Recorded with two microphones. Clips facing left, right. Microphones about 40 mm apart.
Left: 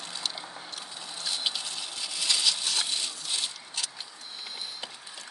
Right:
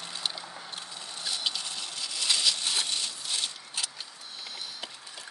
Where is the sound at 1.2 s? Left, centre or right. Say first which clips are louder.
Left 1 dB; centre.